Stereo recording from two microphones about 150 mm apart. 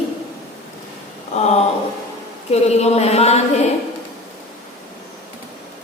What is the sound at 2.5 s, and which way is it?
Speech, 45° left (ahead or behind).